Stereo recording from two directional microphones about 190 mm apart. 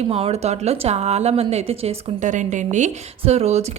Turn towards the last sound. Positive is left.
turn(degrees=-35)  # may be behind; listen again after turning